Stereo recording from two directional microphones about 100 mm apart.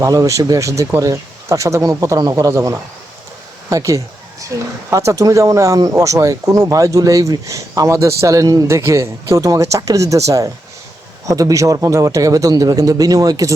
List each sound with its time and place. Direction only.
0.0 s speech: 35° right (ahead or behind)
3.7 s a sound: 35° right (ahead or behind)
4.9 s speech: 30° right (ahead or behind)